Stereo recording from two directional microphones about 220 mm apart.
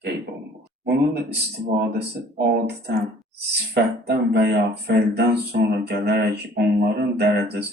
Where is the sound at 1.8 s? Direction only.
50° right (ahead or behind).